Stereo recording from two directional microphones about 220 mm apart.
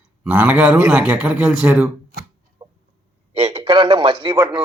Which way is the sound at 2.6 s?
20° right (ahead or behind).